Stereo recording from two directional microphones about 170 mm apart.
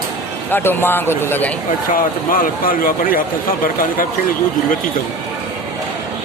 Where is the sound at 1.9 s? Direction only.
55° left (ahead or behind).